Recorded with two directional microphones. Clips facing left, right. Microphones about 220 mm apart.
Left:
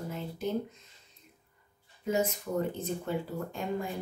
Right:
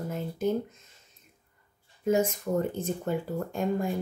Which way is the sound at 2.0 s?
45° right (ahead or behind).